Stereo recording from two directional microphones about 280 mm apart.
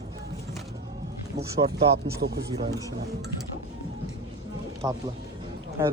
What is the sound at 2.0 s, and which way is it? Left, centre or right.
Speech, right.